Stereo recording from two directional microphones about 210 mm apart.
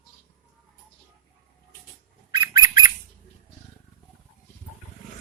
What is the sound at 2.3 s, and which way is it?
Bird, 20° right (ahead or behind).